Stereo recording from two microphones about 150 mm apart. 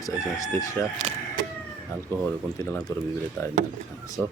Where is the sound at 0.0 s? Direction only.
20° left (ahead or behind).